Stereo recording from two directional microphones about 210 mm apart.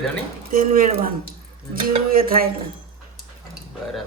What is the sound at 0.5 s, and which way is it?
Speech, 40° right (ahead or behind).